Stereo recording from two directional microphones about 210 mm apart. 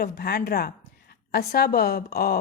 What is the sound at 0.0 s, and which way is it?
A woman's voice, 50° left (ahead or behind).